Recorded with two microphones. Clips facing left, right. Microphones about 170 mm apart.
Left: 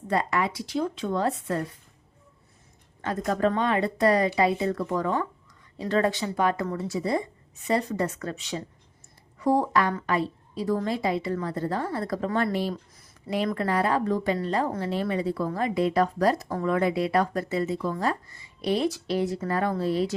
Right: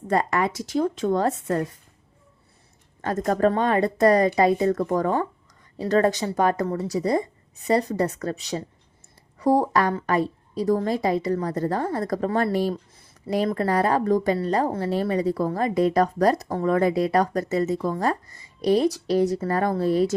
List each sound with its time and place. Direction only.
0.1 s a woman's voice: 45° right (ahead or behind)
3.0 s a woman's voice: 45° right (ahead or behind)